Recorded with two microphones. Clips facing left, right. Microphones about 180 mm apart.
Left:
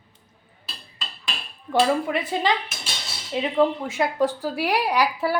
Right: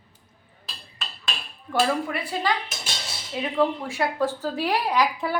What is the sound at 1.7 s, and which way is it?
A woman's voice, 20° left (ahead or behind).